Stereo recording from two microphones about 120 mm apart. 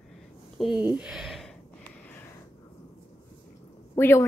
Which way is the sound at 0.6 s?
5° right (ahead or behind).